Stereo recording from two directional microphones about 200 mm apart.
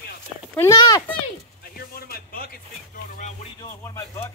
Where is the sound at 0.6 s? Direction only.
15° left (ahead or behind).